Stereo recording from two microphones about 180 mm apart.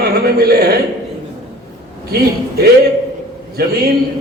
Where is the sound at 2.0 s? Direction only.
60° right (ahead or behind).